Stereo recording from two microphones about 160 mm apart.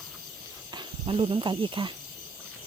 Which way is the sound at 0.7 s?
35° right (ahead or behind).